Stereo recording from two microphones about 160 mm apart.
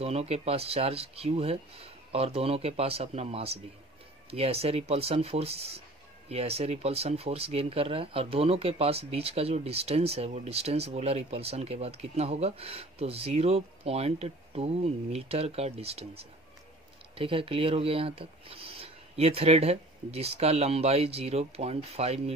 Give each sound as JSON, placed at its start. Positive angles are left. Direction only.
{"t": 0.0, "sound": "speech", "side_deg": -40}
{"t": 17.1, "sound": "speech", "side_deg": -35}